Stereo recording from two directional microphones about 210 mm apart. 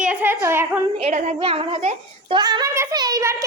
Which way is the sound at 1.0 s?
35° right (ahead or behind).